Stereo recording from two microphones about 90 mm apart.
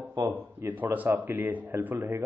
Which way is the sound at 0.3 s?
20° right (ahead or behind).